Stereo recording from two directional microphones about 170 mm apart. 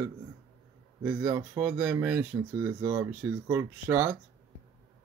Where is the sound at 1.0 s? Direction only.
15° right (ahead or behind).